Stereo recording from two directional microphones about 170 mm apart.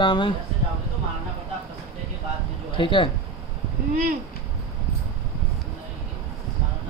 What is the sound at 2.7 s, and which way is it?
Speech, 30° left (ahead or behind).